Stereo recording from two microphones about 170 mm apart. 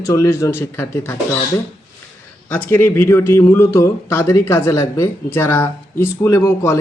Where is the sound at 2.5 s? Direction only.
10° left (ahead or behind).